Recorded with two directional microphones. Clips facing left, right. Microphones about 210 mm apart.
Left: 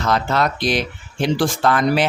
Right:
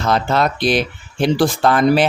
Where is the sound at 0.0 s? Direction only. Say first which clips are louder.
Right 2 dB; 30° right (ahead or behind).